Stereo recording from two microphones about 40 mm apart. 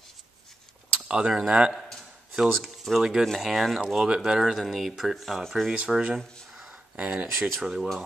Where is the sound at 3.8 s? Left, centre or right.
Centre.